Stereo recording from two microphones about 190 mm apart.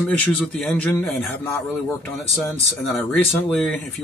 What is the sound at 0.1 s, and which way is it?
A man's voice, 5° left (ahead or behind).